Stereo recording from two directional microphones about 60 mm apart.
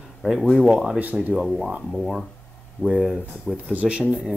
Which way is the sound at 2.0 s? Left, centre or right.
Centre.